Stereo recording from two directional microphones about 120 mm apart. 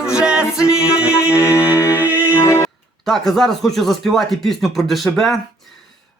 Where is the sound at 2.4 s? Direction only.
20° left (ahead or behind).